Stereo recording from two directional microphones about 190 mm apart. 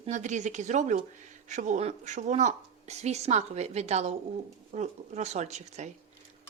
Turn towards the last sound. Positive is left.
turn(degrees=-35)  # may be behind; listen again after turning